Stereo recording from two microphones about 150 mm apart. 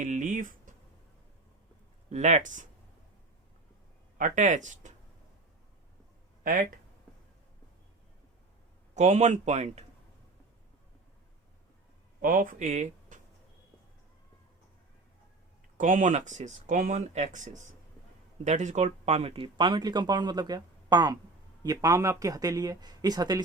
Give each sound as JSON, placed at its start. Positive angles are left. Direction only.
{"t": 0.0, "sound": "speech", "side_deg": -55}
{"t": 2.0, "sound": "speech", "side_deg": -50}
{"t": 4.2, "sound": "speech", "side_deg": -55}
{"t": 6.4, "sound": "speech", "side_deg": -70}
{"t": 9.0, "sound": "speech", "side_deg": -50}
{"t": 12.2, "sound": "speech", "side_deg": -65}
{"t": 15.8, "sound": "speech", "side_deg": -60}